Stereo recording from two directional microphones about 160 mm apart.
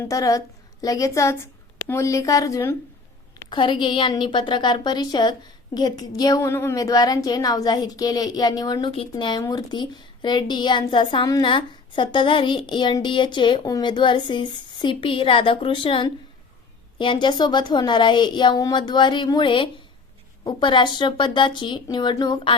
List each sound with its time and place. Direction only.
0.0 s a woman's voice: 20° left (ahead or behind)
3.5 s a woman's voice: 30° left (ahead or behind)